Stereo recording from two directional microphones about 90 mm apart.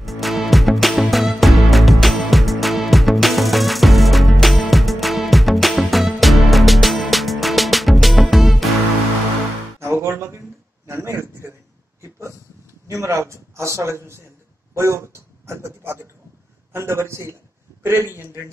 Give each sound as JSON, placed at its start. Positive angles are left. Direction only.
{"t": 0.0, "sound": "music", "side_deg": 0}
{"t": 9.8, "sound": "music", "side_deg": -25}
{"t": 10.9, "sound": "a sound", "side_deg": -30}
{"t": 12.8, "sound": "a man's voice", "side_deg": -35}